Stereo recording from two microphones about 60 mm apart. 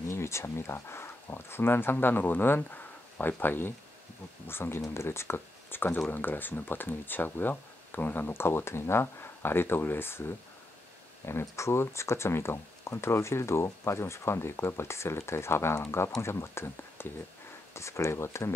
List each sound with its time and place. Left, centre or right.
0.1 s speech: left